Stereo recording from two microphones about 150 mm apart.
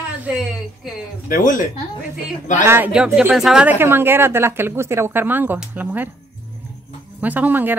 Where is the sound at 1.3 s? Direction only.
60° left (ahead or behind).